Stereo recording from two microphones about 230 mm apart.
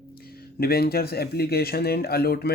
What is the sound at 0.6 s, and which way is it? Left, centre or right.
Speech, left.